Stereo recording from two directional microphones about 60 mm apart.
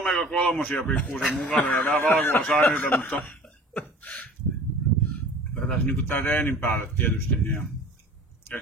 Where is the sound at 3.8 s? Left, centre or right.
Left.